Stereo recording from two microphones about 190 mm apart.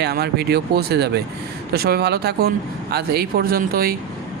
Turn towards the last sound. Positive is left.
turn(degrees=-50)  # may be behind; listen again after turning